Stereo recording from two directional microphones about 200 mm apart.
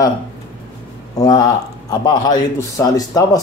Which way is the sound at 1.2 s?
20° left (ahead or behind).